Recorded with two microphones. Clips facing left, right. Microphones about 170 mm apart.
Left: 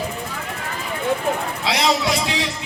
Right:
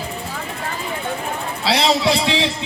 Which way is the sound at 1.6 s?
30° right (ahead or behind).